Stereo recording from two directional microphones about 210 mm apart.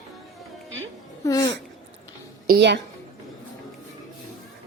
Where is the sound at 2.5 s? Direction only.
55° right (ahead or behind).